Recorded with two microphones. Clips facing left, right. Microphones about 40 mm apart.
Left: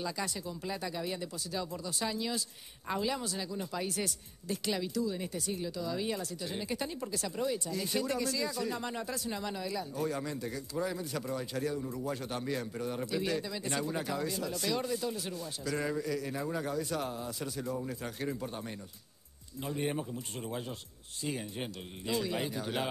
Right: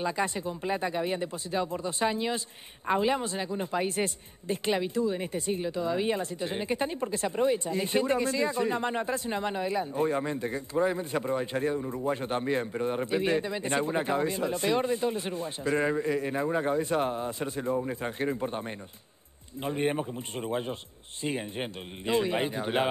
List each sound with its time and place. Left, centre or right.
0.0 s a man's voice: right